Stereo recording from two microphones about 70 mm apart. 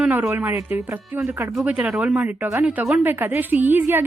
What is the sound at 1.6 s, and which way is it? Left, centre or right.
A woman's voice, centre.